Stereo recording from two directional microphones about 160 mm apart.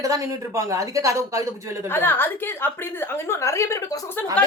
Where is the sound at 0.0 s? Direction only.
20° right (ahead or behind).